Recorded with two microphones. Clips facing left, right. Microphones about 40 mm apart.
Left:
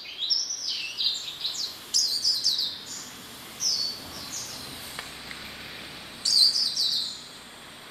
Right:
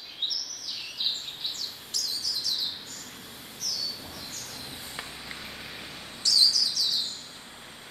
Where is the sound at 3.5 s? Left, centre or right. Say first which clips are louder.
Left 4 dB; left.